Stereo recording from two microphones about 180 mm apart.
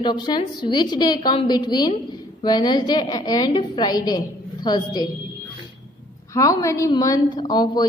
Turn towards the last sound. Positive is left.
turn(degrees=20)  # may be behind; listen again after turning